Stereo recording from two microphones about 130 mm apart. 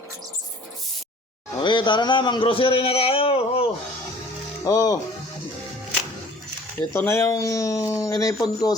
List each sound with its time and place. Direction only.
1.5 s a man's voice: 35° left (ahead or behind)
4.6 s speech: 25° left (ahead or behind)
6.9 s speech: 20° left (ahead or behind)